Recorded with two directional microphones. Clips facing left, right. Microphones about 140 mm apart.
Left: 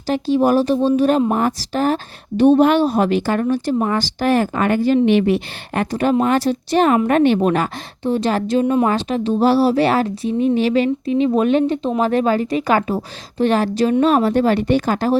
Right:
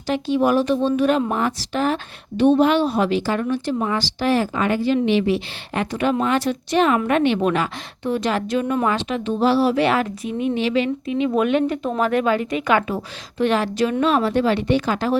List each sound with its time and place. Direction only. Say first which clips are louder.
0.1 s a woman's voice: left 3 dB; 35° left (ahead or behind)